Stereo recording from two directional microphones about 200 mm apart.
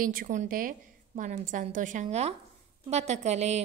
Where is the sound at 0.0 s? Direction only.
45° right (ahead or behind).